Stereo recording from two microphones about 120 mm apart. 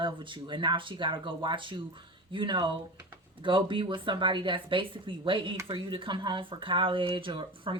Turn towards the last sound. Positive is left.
turn(degrees=-45)  # may be behind; listen again after turning